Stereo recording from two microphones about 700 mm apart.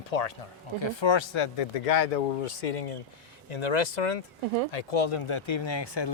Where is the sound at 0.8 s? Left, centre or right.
Left.